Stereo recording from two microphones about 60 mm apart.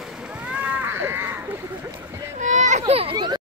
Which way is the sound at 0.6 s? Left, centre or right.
Right.